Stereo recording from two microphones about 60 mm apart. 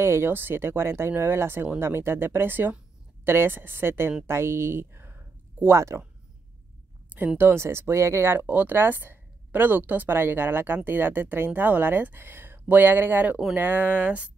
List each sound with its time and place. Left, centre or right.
0.0 s speech: right
5.7 s speech: right
7.3 s speech: right
8.5 s speech: right